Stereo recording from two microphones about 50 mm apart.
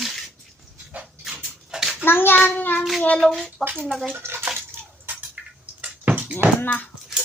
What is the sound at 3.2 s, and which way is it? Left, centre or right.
Speech, centre.